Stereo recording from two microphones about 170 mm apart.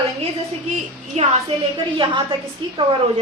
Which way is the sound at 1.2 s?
40° right (ahead or behind).